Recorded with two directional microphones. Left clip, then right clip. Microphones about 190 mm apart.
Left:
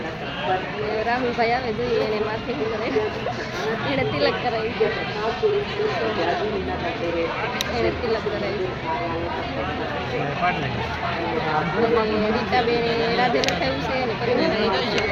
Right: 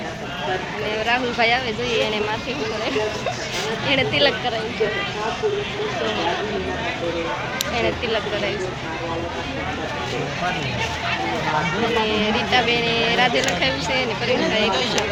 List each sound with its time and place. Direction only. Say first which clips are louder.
1.0 s speech: right 3 dB; 5° right (ahead or behind)
3.9 s speech: right 5 dB; 10° right (ahead or behind)
12.5 s speech: right 3 dB; 5° right (ahead or behind)
14.4 s speech: right 2 dB; 60° right (ahead or behind)